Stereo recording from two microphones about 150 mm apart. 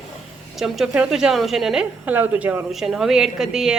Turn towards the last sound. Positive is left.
turn(degrees=-5)  # may be behind; listen again after turning